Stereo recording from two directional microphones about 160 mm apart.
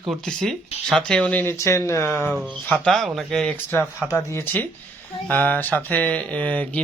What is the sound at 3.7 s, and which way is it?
Speech, 15° left (ahead or behind).